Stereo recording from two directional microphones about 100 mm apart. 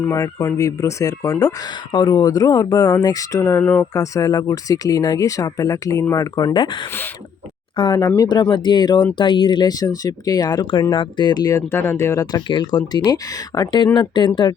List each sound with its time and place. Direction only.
0.1 s speech: 35° left (ahead or behind)
3.6 s speech: 15° left (ahead or behind)
3.9 s speech: 35° left (ahead or behind)
8.4 s speech: 55° left (ahead or behind)
11.7 s speech: 25° left (ahead or behind)
12.2 s speech: 45° left (ahead or behind)